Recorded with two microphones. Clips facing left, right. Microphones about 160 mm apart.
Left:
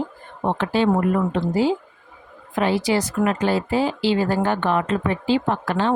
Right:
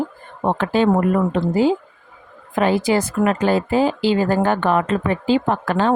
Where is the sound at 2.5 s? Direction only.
50° right (ahead or behind).